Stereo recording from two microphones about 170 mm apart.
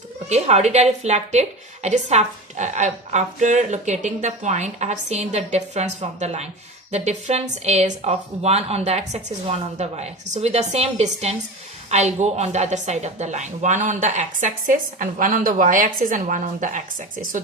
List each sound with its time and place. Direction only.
0.3 s a woman's voice: 40° right (ahead or behind)